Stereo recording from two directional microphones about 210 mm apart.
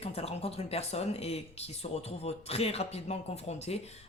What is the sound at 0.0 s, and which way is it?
Speech, 30° left (ahead or behind).